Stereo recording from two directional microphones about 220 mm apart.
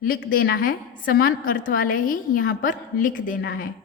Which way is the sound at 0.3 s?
40° left (ahead or behind).